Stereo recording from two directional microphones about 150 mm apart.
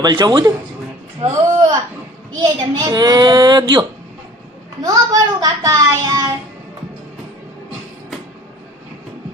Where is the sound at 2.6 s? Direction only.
25° right (ahead or behind).